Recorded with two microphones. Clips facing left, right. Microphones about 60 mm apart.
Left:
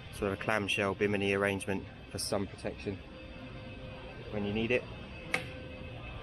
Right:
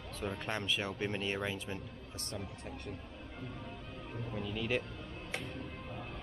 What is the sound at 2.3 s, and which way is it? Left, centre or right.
Speech, left.